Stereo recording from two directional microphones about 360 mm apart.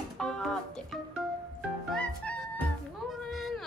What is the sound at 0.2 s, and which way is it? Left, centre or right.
Music, centre.